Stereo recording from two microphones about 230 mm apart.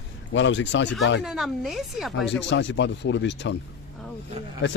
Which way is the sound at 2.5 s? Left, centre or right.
Left.